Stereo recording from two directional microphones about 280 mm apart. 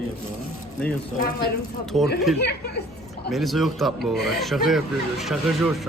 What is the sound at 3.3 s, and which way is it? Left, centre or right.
Speech, centre.